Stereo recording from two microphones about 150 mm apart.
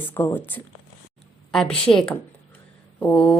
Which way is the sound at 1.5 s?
5° left (ahead or behind).